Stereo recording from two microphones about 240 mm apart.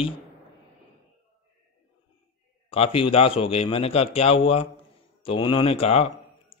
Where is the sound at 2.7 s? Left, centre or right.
Left.